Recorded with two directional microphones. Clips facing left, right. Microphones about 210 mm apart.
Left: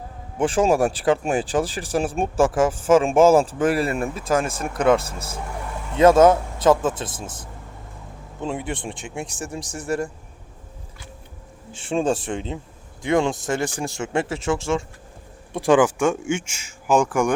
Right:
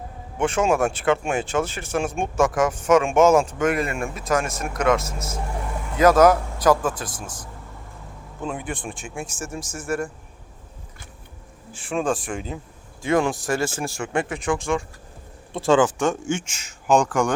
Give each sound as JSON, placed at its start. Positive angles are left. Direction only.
{"t": 0.3, "sound": "speech", "side_deg": 30}
{"t": 8.4, "sound": "speech", "side_deg": 25}
{"t": 11.7, "sound": "speech", "side_deg": 25}
{"t": 15.5, "sound": "speech", "side_deg": 15}